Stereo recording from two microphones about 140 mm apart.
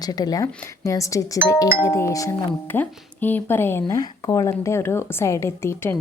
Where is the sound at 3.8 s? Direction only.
25° left (ahead or behind).